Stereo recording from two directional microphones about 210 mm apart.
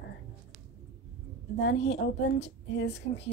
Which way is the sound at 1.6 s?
55° left (ahead or behind).